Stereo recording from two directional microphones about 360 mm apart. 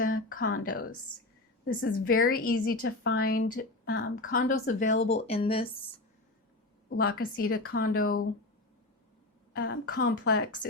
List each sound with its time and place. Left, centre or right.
0.0 s a woman's voice: left
6.9 s a woman's voice: left
9.5 s a woman's voice: left
9.9 s speech: left